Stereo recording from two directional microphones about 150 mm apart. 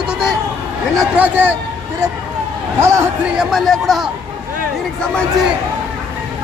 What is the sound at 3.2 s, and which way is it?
Speech, 5° right (ahead or behind).